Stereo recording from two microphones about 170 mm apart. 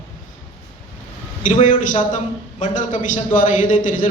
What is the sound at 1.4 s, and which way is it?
A man's voice, 50° left (ahead or behind).